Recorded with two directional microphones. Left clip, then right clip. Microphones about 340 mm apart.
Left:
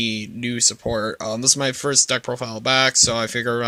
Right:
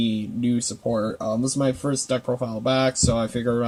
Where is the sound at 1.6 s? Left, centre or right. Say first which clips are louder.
Left 4 dB; left.